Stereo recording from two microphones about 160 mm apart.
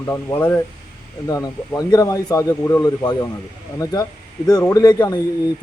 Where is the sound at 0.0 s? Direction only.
20° left (ahead or behind).